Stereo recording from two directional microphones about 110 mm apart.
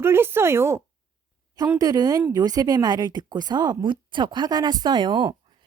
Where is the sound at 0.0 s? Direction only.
20° right (ahead or behind).